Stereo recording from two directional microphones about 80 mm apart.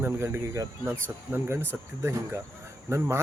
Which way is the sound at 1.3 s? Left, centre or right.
Right.